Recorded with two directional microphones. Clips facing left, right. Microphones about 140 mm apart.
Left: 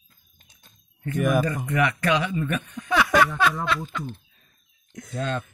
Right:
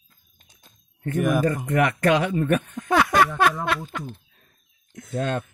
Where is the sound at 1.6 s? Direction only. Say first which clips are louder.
Right 3 dB; 45° right (ahead or behind).